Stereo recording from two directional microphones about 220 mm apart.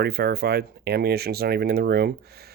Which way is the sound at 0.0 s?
45° right (ahead or behind).